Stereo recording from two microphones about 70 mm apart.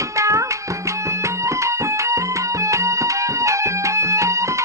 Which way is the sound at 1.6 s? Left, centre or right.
Right.